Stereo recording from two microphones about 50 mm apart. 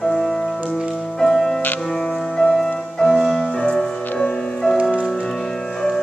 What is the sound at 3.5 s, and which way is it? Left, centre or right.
Music, left.